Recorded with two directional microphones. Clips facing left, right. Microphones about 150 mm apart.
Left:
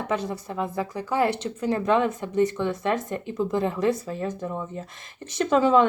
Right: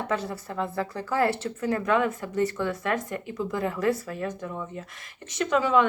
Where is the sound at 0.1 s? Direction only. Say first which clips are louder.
Left 2 dB; 20° left (ahead or behind).